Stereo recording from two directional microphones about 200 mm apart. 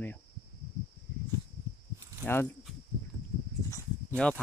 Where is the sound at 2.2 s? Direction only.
10° left (ahead or behind).